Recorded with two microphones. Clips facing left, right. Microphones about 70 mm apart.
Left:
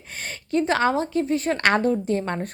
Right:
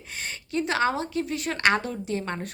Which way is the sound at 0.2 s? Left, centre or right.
Left.